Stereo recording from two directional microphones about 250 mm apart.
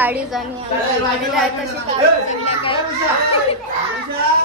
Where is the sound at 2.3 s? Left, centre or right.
Left.